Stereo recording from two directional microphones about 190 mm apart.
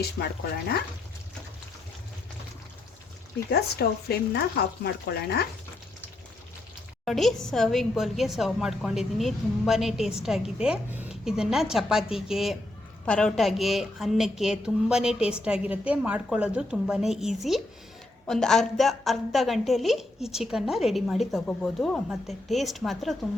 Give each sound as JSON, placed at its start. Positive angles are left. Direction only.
{"t": 0.2, "sound": "speech", "side_deg": 60}
{"t": 3.5, "sound": "speech", "side_deg": 55}
{"t": 7.0, "sound": "a woman's voice", "side_deg": 0}